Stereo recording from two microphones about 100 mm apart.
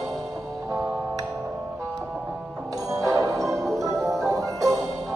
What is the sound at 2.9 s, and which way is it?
Music, 35° right (ahead or behind).